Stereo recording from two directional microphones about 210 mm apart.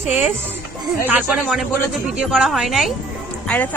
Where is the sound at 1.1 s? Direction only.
5° right (ahead or behind).